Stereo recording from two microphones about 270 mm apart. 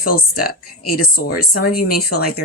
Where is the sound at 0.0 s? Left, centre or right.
Left.